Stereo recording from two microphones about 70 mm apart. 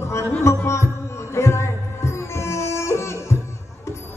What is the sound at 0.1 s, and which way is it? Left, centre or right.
Music, left.